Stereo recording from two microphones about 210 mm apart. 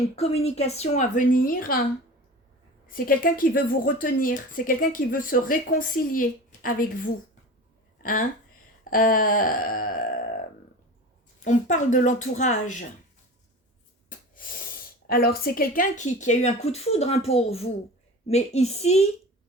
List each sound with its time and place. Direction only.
0.2 s speech: 30° left (ahead or behind)
2.8 s speech: 40° left (ahead or behind)
8.8 s a sound: 40° left (ahead or behind)
11.4 s speech: 40° left (ahead or behind)
15.0 s speech: 45° left (ahead or behind); by 19.0 s 30° left (ahead or behind)